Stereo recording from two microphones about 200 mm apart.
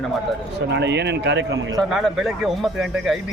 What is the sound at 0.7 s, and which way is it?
A man's voice, 60° right (ahead or behind).